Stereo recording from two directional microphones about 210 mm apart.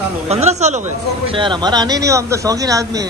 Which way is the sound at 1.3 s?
20° right (ahead or behind).